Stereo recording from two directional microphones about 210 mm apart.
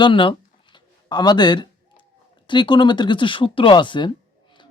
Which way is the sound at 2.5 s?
20° left (ahead or behind).